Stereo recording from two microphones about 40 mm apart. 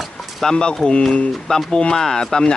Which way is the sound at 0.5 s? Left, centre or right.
Left.